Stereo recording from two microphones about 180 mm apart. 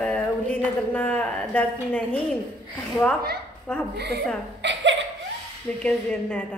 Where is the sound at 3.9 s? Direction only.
65° right (ahead or behind).